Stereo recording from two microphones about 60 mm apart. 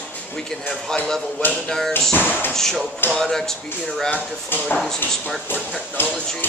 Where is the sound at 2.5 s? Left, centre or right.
Centre.